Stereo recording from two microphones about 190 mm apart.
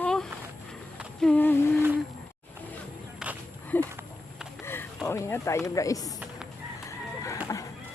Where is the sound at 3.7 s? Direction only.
10° left (ahead or behind).